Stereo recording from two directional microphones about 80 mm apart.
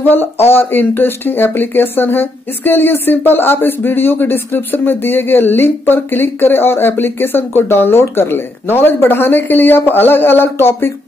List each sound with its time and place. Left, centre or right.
0.0 s speech: left